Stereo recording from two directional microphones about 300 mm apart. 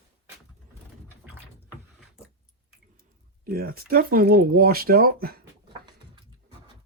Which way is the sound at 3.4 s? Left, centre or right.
Right.